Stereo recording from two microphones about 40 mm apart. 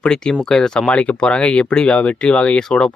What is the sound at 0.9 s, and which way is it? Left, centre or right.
Speech, left.